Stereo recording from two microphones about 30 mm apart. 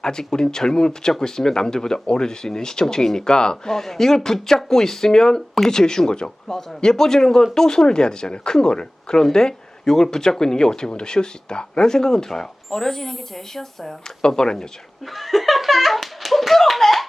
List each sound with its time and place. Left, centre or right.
0.0 s speech: left
3.8 s speech: centre
6.9 s speech: centre
11.9 s speech: centre
14.2 s speech: left
15.0 s slap: centre